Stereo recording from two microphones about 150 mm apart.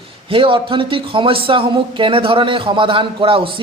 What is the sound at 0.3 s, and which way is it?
A man's voice, 35° right (ahead or behind).